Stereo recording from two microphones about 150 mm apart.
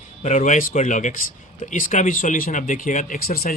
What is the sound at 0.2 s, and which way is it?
Speech, 55° left (ahead or behind).